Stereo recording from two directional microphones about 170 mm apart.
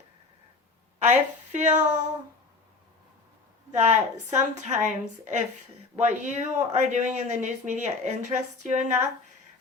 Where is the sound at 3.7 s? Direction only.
40° right (ahead or behind).